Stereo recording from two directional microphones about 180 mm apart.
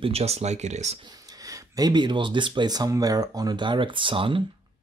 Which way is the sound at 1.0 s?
20° right (ahead or behind).